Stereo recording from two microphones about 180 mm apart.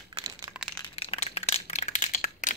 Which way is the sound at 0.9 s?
35° left (ahead or behind).